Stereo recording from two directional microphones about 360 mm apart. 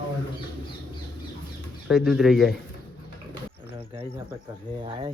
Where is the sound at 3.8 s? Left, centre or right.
Centre.